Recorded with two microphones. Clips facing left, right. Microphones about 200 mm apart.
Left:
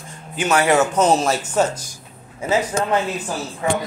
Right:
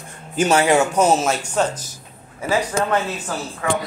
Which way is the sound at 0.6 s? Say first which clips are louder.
Left 3 dB; 15° right (ahead or behind).